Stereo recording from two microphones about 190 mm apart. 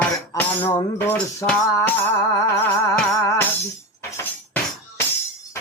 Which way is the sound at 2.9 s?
15° left (ahead or behind).